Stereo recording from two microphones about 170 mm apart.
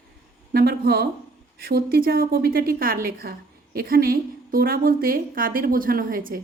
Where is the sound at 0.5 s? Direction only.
65° right (ahead or behind).